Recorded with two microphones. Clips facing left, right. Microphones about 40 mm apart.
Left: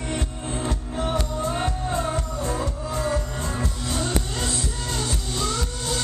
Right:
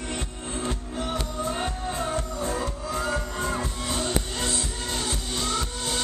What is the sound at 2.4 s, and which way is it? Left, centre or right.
Music, centre.